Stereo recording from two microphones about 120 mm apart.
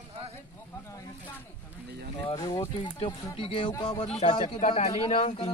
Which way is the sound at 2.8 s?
50° left (ahead or behind).